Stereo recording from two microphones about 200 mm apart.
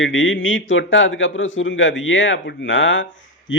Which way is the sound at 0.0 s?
70° left (ahead or behind).